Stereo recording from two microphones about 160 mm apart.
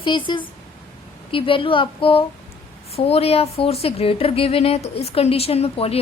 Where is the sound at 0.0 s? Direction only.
30° left (ahead or behind).